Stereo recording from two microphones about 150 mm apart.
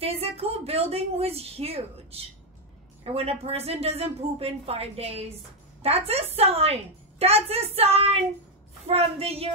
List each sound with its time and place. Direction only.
0.0 s a woman's voice: 40° right (ahead or behind)